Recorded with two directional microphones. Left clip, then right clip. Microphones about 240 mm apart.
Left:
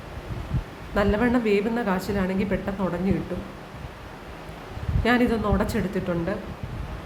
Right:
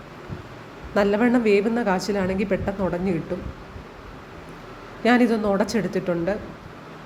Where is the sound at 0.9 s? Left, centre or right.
Centre.